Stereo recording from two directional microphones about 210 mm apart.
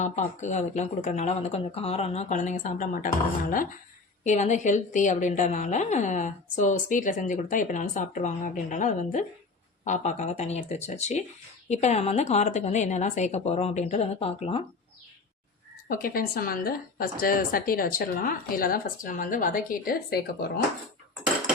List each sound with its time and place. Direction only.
0.0 s a woman's voice: 35° left (ahead or behind)
15.9 s a woman's voice: 40° left (ahead or behind)